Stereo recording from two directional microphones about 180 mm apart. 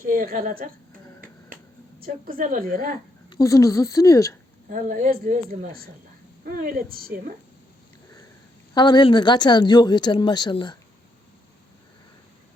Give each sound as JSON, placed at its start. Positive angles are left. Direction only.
{"t": 0.0, "sound": "a woman's voice", "side_deg": -50}
{"t": 2.0, "sound": "a woman's voice", "side_deg": -55}
{"t": 3.2, "sound": "a woman's voice", "side_deg": 20}
{"t": 4.7, "sound": "a woman's voice", "side_deg": -50}
{"t": 8.7, "sound": "speech", "side_deg": 25}